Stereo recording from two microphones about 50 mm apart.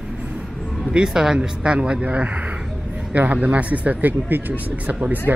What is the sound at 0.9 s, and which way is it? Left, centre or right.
Speech, centre.